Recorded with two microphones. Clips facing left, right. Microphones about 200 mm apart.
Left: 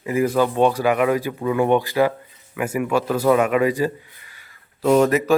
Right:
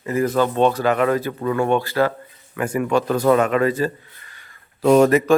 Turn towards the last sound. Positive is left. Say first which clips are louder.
# right 2 dB
turn(degrees=-55)  # may be behind; listen again after turning